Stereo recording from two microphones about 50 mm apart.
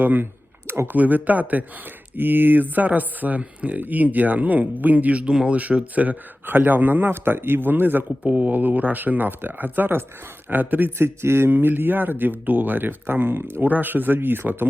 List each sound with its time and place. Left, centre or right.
0.0 s speech: right
8.2 s speech: right
10.9 s speech: right